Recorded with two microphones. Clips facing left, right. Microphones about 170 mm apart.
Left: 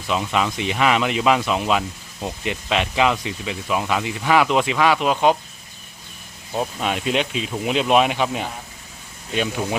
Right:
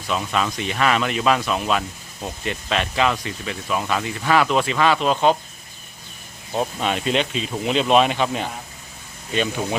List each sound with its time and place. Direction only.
0.1 s speech: 15° left (ahead or behind)
6.5 s speech: centre (ahead or behind)